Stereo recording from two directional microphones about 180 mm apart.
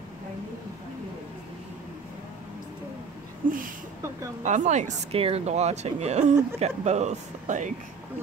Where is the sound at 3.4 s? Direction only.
50° right (ahead or behind).